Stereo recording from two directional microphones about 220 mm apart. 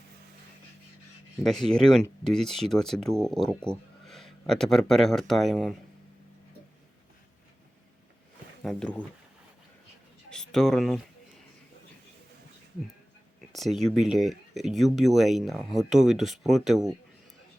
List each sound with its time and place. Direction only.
1.5 s speech: centre (ahead or behind)
8.6 s speech: 5° left (ahead or behind)
10.2 s speech: centre (ahead or behind)
13.5 s speech: centre (ahead or behind)